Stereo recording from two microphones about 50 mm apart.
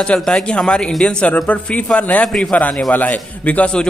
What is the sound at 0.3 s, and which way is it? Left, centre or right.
Speech, centre.